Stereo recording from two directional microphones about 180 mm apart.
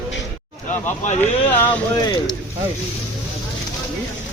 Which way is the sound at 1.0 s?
40° left (ahead or behind).